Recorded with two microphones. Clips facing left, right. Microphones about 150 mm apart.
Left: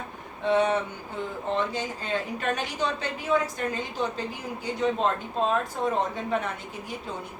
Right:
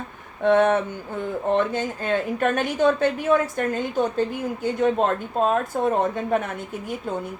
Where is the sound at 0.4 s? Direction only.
55° right (ahead or behind).